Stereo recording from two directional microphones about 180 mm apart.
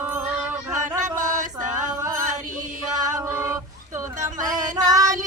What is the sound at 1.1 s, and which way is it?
Music, 45° right (ahead or behind).